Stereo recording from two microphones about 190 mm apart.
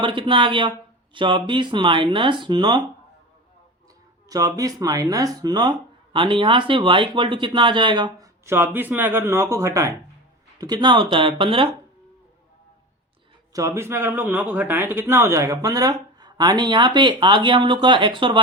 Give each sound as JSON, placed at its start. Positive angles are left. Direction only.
{"t": 0.0, "sound": "speech", "side_deg": -25}
{"t": 4.3, "sound": "speech", "side_deg": -20}
{"t": 13.5, "sound": "speech", "side_deg": -15}